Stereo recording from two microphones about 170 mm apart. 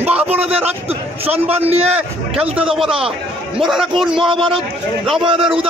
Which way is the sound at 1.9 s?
5° right (ahead or behind).